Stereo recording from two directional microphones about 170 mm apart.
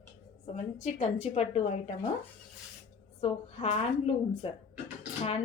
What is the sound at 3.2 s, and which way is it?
Speech, 40° left (ahead or behind).